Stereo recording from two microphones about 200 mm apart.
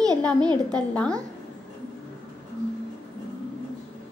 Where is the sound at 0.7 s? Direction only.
5° left (ahead or behind).